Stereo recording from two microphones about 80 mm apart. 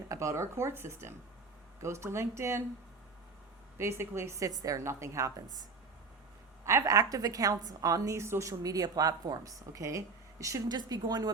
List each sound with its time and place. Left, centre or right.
0.1 s a woman's voice: right
3.8 s a woman's voice: right
6.7 s a woman's voice: right
6.9 s a woman's voice: right
10.7 s speech: right